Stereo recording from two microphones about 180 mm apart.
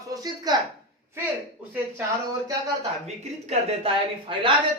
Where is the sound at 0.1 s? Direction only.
20° right (ahead or behind).